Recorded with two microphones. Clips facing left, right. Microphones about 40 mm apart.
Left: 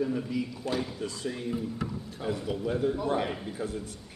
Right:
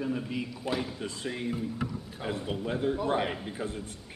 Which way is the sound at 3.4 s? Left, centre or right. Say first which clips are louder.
Left 1 dB; right.